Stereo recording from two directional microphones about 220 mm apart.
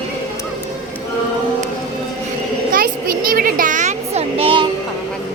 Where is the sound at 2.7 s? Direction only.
40° right (ahead or behind); by 4.7 s 25° right (ahead or behind).